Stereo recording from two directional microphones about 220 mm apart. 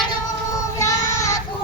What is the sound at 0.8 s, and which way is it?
Child singing, 15° left (ahead or behind).